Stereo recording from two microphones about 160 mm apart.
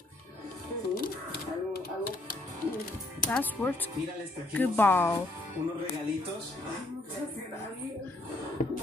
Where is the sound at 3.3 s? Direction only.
10° left (ahead or behind).